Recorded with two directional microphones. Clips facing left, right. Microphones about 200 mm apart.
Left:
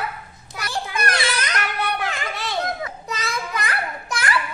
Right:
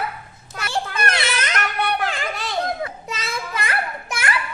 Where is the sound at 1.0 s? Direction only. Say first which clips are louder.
Even; 25° right (ahead or behind).